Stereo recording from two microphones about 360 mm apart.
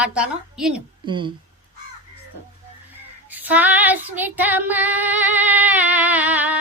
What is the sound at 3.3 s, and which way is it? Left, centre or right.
Female singing, centre.